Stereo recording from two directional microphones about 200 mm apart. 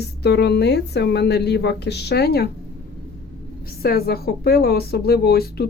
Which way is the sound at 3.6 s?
50° left (ahead or behind).